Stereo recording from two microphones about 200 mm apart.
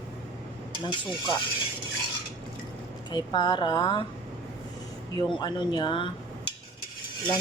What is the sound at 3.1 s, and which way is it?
Speech, 20° left (ahead or behind).